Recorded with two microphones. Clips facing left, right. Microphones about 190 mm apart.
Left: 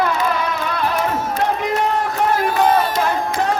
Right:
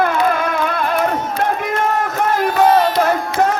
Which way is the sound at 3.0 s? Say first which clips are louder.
Right 3 dB; 45° right (ahead or behind).